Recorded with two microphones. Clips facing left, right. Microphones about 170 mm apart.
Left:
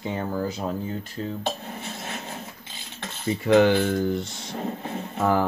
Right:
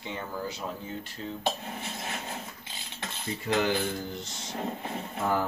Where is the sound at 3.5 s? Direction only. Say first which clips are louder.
Left 11 dB; 65° left (ahead or behind).